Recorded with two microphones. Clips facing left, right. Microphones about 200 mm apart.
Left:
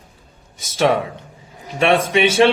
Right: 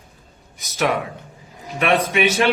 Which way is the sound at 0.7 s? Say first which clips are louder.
Left 4 dB; 30° left (ahead or behind).